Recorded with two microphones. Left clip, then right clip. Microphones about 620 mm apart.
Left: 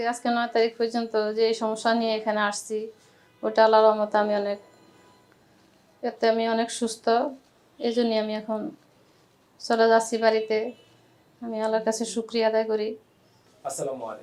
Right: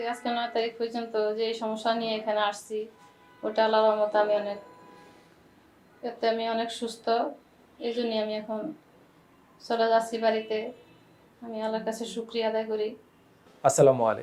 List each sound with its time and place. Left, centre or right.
0.0 s speech: left
6.0 s speech: left
9.6 s a woman's voice: left
13.6 s speech: right